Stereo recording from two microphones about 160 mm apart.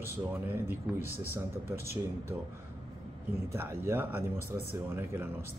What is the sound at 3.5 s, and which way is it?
Speech, 15° right (ahead or behind).